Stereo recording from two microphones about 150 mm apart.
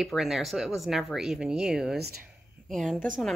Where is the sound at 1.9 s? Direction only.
90° right.